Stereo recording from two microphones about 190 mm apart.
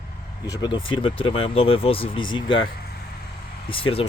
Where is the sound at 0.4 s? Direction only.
20° left (ahead or behind).